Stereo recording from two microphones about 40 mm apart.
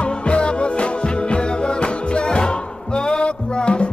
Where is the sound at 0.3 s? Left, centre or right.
Left.